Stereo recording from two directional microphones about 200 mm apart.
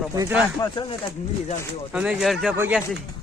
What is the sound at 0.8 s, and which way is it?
Speech, 25° left (ahead or behind).